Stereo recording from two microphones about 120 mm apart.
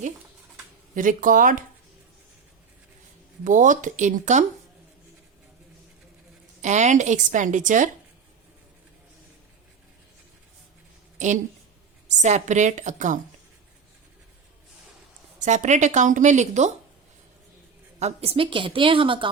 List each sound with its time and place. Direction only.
0.9 s a woman's voice: 90° right
3.4 s a woman's voice: 90° right
6.6 s a woman's voice: 80° right
11.2 s a woman's voice: 80° right
15.4 s a woman's voice: 85° right
18.0 s a woman's voice: 55° right (ahead or behind)